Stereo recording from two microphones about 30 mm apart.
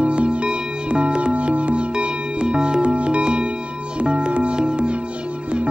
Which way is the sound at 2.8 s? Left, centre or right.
Right.